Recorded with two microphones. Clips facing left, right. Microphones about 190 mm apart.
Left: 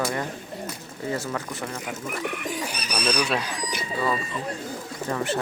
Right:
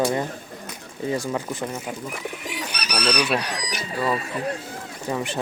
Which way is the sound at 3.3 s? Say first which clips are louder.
Right 2 dB; 75° right (ahead or behind).